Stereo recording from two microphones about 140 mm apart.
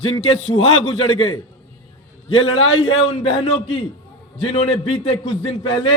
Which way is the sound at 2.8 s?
45° left (ahead or behind).